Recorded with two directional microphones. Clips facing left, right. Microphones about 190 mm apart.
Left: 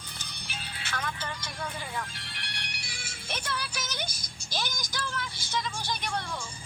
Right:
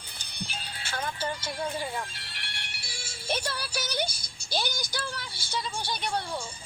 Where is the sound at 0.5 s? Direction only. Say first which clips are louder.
Left 1 dB; 30° right (ahead or behind).